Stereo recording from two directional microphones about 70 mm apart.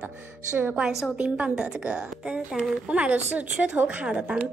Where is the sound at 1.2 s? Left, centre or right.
Centre.